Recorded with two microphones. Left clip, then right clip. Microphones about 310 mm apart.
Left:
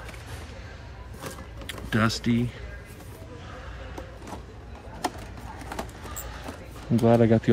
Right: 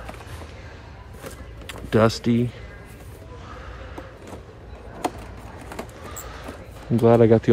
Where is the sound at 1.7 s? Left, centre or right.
Centre.